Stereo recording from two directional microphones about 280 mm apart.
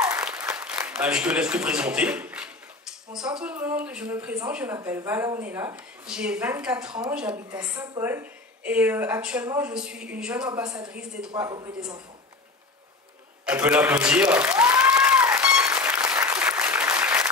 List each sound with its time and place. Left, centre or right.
0.0 s applause: centre
3.1 s a woman's voice: centre
6.9 s a woman's voice: centre
11.3 s a woman's voice: centre
13.5 s applause: centre